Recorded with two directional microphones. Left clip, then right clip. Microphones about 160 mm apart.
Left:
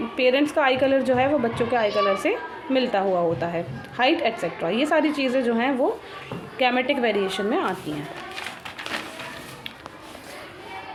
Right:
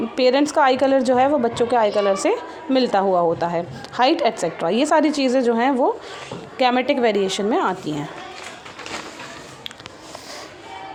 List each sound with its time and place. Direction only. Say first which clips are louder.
0.2 s a woman's voice: right 4 dB; 40° right (ahead or behind)